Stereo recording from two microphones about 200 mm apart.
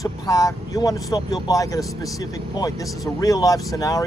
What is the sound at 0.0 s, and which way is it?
Speech, 15° left (ahead or behind).